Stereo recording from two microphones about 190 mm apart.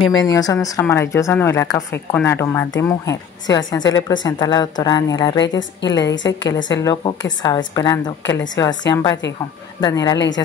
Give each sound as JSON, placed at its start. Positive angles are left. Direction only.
{"t": 0.2, "sound": "a woman's voice", "side_deg": 20}
{"t": 10.1, "sound": "a woman's voice", "side_deg": 70}